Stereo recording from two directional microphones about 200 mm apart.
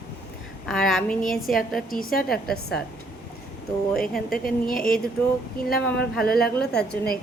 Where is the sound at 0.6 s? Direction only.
Centre (ahead or behind).